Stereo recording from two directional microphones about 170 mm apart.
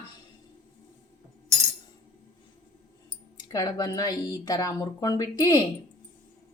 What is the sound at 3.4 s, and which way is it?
Speech, 25° left (ahead or behind).